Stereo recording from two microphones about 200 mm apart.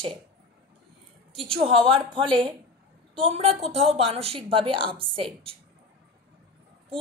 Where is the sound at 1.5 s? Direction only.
25° right (ahead or behind).